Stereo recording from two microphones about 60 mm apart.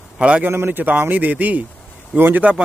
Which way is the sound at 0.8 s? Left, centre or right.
Right.